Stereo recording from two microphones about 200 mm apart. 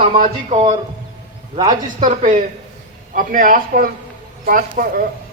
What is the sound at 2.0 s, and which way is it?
A man's voice, 35° right (ahead or behind).